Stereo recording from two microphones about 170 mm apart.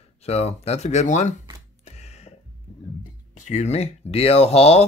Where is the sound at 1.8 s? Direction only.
40° left (ahead or behind).